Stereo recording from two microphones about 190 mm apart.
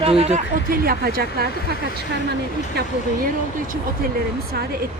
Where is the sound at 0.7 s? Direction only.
50° right (ahead or behind).